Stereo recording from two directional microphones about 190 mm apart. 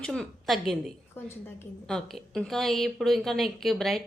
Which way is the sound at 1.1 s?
10° left (ahead or behind).